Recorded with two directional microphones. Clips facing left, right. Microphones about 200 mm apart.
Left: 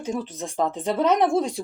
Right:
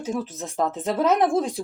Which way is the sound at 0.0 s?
Centre (ahead or behind).